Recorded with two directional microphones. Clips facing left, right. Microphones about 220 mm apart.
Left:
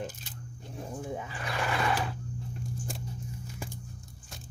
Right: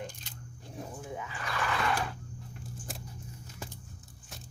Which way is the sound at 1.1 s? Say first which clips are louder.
Even; 30° left (ahead or behind).